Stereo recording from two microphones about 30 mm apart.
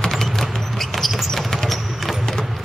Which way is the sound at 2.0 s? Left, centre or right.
Centre.